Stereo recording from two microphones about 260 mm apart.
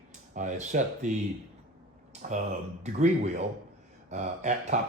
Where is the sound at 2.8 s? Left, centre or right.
Right.